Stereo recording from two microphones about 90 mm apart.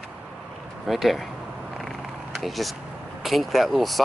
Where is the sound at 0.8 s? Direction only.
Centre (ahead or behind).